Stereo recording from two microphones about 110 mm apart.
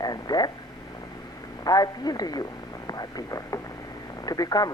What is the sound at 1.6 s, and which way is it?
Speech, 35° left (ahead or behind).